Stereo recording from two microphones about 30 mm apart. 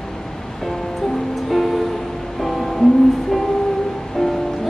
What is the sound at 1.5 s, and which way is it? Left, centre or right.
Music, centre.